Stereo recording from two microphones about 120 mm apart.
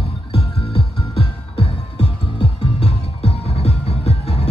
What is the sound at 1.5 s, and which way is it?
Music, 55° left (ahead or behind).